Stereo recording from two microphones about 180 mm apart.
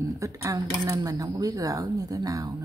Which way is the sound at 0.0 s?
15° right (ahead or behind).